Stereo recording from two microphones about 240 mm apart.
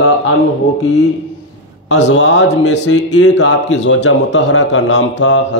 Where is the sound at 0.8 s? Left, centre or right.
Left.